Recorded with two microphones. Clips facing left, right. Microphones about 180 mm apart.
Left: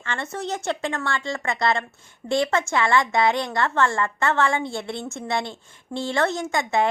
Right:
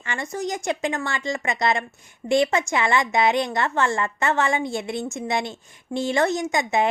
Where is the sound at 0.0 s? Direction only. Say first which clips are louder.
Right 2 dB; 15° right (ahead or behind).